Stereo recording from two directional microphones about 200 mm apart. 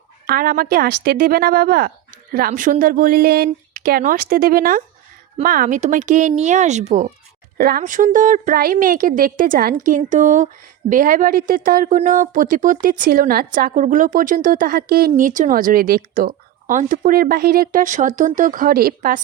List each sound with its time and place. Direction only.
0.3 s a woman's voice: 50° right (ahead or behind)
7.6 s a woman's voice: 50° right (ahead or behind)